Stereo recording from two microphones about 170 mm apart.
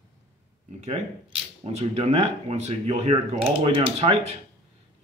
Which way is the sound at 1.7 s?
40° right (ahead or behind).